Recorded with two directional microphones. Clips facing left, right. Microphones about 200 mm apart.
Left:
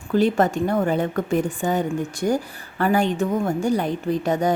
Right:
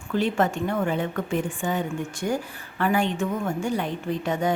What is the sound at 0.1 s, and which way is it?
A woman's voice, 40° left (ahead or behind).